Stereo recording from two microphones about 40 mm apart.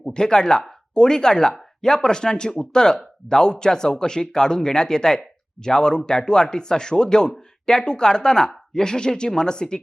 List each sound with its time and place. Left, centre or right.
0.1 s speech: centre